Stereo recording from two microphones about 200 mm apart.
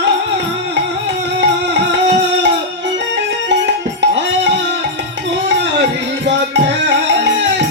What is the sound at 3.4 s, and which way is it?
Music, 65° right (ahead or behind).